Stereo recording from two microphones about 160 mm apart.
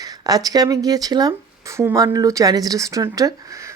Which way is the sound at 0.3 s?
25° right (ahead or behind).